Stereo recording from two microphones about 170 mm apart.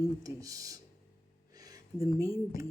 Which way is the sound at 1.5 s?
20° right (ahead or behind).